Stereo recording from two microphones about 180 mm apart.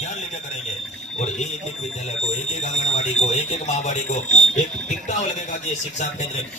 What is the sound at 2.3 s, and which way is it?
A man's voice, 40° left (ahead or behind).